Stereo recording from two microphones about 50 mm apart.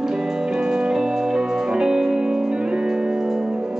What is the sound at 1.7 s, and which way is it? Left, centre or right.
Music, centre.